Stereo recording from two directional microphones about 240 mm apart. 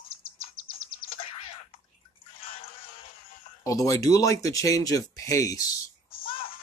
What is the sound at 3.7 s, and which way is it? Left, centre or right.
Speech, centre.